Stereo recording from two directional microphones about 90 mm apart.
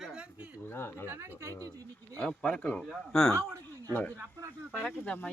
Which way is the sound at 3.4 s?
35° right (ahead or behind).